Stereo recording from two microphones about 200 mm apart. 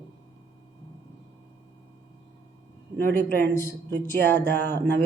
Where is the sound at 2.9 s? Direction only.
10° left (ahead or behind).